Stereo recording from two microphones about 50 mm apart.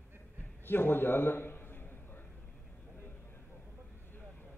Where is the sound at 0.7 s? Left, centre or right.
Left.